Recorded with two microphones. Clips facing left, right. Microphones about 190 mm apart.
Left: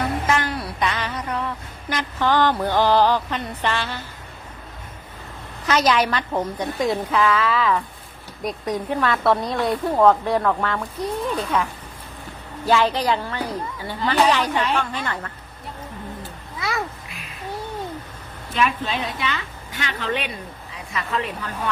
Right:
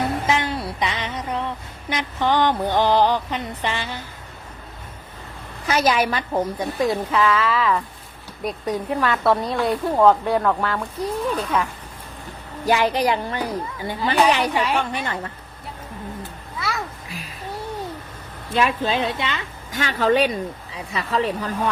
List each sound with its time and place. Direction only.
0.0 s music: 20° right (ahead or behind)
1.9 s speech: 20° right (ahead or behind)
5.6 s speech: 5° right (ahead or behind)
12.6 s speech: 15° right (ahead or behind)
18.5 s a woman's voice: 30° right (ahead or behind)
19.7 s speech: 45° right (ahead or behind)